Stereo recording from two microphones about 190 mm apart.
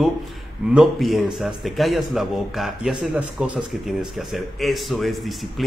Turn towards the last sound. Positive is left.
turn(degrees=0)  # may be behind; listen again after turning